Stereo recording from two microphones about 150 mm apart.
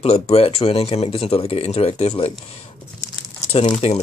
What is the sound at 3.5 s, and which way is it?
Speech, 40° left (ahead or behind).